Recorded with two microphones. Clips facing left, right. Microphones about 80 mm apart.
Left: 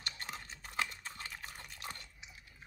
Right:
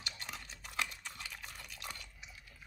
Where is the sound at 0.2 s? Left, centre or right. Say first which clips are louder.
Left 2 dB; left.